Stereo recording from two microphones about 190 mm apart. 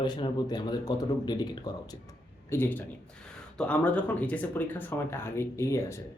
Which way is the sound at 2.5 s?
10° left (ahead or behind).